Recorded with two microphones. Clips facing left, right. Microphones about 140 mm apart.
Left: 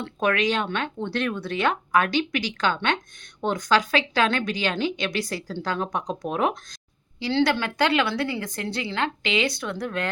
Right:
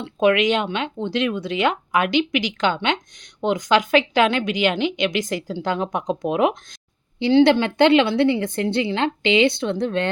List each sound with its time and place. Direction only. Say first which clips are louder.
0.0 s a woman's voice: right 6 dB; 20° right (ahead or behind)